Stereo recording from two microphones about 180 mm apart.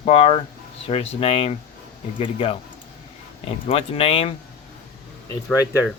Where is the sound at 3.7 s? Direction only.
30° left (ahead or behind).